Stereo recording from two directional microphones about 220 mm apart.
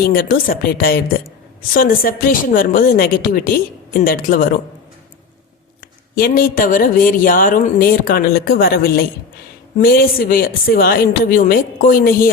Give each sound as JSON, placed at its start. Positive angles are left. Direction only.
{"t": 0.0, "sound": "speech", "side_deg": 40}
{"t": 6.1, "sound": "speech", "side_deg": 40}